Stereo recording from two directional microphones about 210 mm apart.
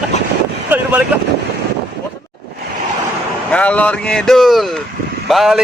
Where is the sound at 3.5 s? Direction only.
5° left (ahead or behind).